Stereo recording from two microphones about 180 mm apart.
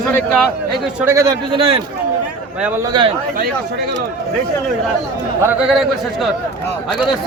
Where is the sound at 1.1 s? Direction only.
20° right (ahead or behind).